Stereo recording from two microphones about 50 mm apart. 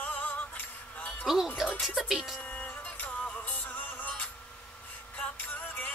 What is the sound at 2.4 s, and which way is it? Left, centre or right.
Music, left.